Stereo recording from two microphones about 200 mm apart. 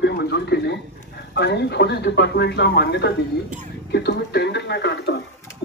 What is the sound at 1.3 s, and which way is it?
A man's voice, 60° left (ahead or behind).